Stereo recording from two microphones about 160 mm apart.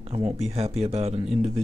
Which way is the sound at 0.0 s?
40° right (ahead or behind).